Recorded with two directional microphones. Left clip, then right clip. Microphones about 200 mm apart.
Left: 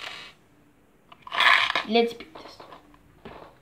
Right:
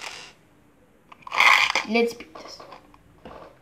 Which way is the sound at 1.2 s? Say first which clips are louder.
Right 2 dB; 15° right (ahead or behind).